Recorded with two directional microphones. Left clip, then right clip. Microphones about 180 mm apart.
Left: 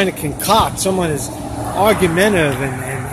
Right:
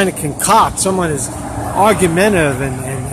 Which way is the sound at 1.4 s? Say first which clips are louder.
Right 2 dB; 40° right (ahead or behind).